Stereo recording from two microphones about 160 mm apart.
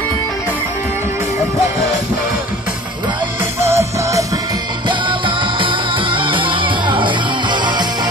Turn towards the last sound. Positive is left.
turn(degrees=-30)  # may be behind; listen again after turning